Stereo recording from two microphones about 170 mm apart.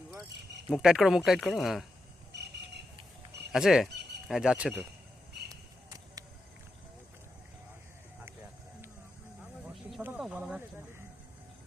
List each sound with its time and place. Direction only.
0.7 s speech: centre (ahead or behind)
2.3 s a sound: 80° right
3.5 s speech: 5° right (ahead or behind)
5.5 s basketball bounce: 20° right (ahead or behind)
10.0 s snake: 10° right (ahead or behind)